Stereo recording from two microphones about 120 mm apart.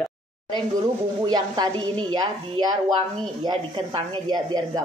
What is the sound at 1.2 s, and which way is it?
Speech, 35° right (ahead or behind).